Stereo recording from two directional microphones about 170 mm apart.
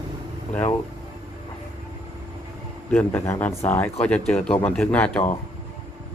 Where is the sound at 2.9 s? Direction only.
10° left (ahead or behind).